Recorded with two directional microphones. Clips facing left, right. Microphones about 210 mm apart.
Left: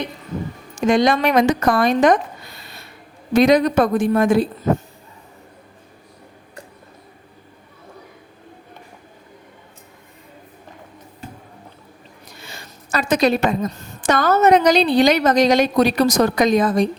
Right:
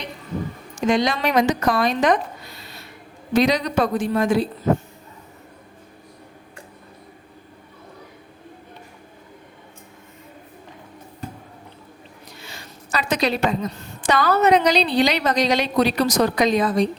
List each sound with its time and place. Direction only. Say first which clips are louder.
0.8 s a woman's voice: left 4 dB; 50° left (ahead or behind)
3.3 s a woman's voice: left 5 dB; 50° left (ahead or behind)
12.5 s a woman's voice: left 3 dB; 50° left (ahead or behind)